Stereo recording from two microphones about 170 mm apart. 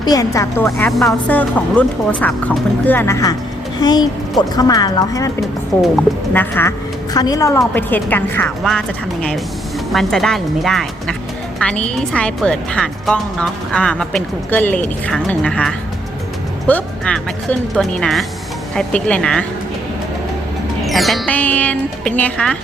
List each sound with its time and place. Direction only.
0.0 s a woman's voice: 20° left (ahead or behind)
0.9 s a woman's voice: centre (ahead or behind)
9.9 s a woman's voice: centre (ahead or behind)
20.8 s a woman's voice: centre (ahead or behind)